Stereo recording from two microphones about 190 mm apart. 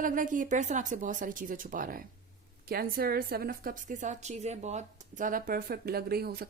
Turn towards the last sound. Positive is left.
turn(degrees=-55)  # may be behind; listen again after turning